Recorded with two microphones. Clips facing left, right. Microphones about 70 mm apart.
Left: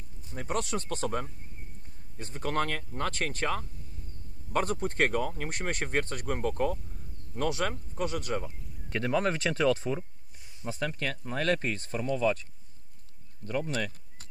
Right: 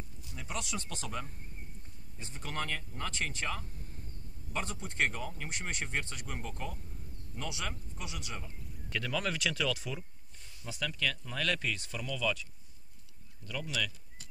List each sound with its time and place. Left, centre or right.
0.3 s speech: left
13.5 s speech: left